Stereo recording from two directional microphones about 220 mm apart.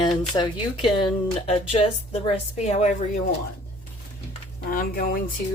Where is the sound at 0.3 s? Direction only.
20° left (ahead or behind).